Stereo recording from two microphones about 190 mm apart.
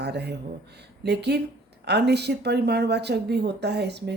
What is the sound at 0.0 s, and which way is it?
Speech, 60° right (ahead or behind).